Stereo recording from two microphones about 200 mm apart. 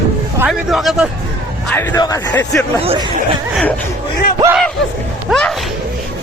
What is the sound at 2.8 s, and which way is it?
Speech, 30° right (ahead or behind).